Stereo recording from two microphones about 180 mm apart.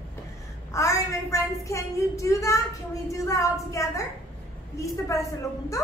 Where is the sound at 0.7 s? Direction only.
15° left (ahead or behind).